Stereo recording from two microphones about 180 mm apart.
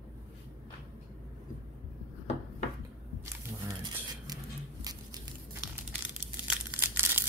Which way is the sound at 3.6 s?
20° right (ahead or behind).